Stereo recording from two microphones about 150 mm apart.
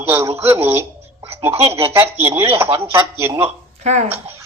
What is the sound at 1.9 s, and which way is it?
Speech, 15° right (ahead or behind).